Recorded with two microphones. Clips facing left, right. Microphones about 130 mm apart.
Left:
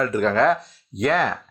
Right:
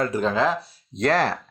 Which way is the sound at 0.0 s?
35° right (ahead or behind).